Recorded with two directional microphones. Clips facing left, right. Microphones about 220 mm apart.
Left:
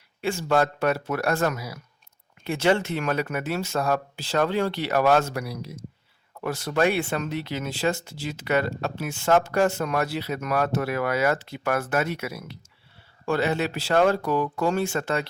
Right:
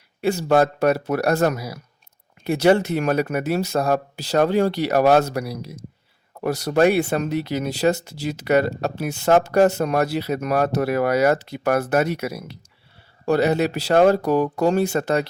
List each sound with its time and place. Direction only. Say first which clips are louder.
0.2 s speech: right 5 dB; 40° right (ahead or behind)